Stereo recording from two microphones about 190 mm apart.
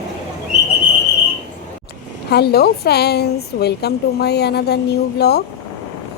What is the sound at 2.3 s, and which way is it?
A woman's voice, 55° left (ahead or behind).